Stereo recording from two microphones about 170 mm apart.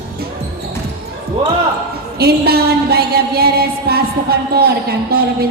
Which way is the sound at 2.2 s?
65° right (ahead or behind).